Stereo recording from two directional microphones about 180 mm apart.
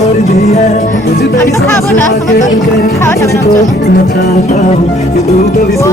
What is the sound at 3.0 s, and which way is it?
Music, 15° left (ahead or behind).